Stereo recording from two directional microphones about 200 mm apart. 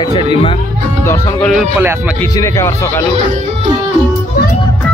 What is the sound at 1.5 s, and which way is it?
Speech, 10° right (ahead or behind).